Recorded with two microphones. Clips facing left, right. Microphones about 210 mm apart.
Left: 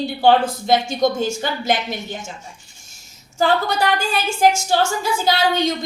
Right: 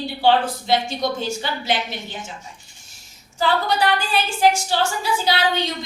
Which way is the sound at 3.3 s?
45° left (ahead or behind).